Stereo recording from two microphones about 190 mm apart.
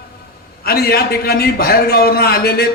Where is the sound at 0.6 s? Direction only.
55° left (ahead or behind).